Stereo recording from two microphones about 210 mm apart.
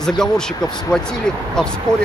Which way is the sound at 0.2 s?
5° left (ahead or behind).